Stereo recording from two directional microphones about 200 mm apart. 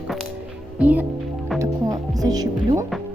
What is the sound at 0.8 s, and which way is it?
Speech, 10° right (ahead or behind).